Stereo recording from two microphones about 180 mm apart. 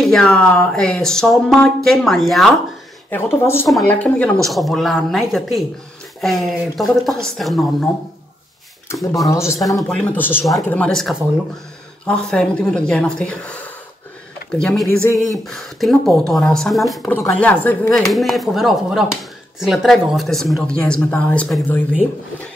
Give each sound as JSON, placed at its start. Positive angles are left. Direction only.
{"t": 0.0, "sound": "speech", "side_deg": 5}
{"t": 3.1, "sound": "speech", "side_deg": 10}
{"t": 6.2, "sound": "speech", "side_deg": 0}
{"t": 8.9, "sound": "speech", "side_deg": 0}
{"t": 9.3, "sound": "speech", "side_deg": 15}